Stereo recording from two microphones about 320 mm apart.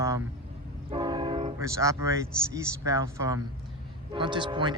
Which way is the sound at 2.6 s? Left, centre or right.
Centre.